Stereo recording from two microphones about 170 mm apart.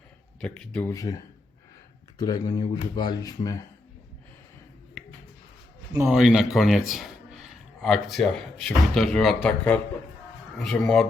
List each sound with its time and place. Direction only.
0.4 s speech: 5° left (ahead or behind)
0.9 s speech: 20° left (ahead or behind)
5.0 s a sound: centre (ahead or behind)
6.1 s a man's voice: 5° right (ahead or behind)